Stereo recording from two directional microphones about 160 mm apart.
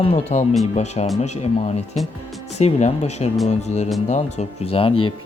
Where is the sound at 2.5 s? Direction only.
45° left (ahead or behind).